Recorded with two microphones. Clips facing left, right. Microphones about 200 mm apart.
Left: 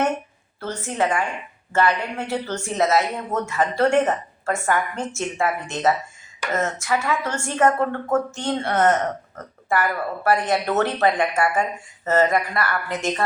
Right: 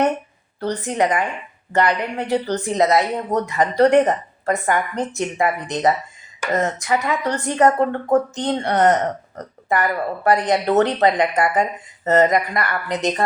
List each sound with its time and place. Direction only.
0.6 s a woman's voice: 15° right (ahead or behind)